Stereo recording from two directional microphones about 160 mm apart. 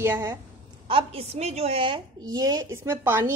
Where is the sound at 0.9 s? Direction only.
35° right (ahead or behind).